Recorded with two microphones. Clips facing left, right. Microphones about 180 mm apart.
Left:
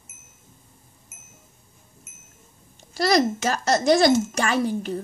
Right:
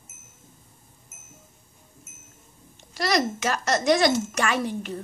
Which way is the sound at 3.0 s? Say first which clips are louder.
Left 4 dB; 30° left (ahead or behind).